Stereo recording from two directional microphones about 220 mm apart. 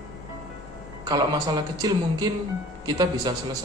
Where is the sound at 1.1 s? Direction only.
20° right (ahead or behind).